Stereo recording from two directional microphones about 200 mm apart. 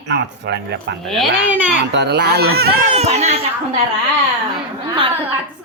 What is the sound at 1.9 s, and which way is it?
Speech, 55° right (ahead or behind).